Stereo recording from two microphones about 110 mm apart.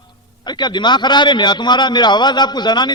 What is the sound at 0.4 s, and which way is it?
A man's voice, 40° left (ahead or behind).